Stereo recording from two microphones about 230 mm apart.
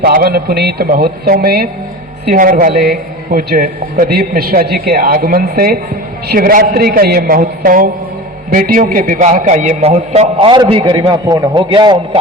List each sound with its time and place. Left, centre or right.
0.0 s a man's voice: right; by 12.2 s centre